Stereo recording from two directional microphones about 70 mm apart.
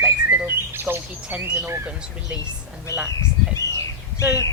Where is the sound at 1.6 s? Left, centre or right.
Right.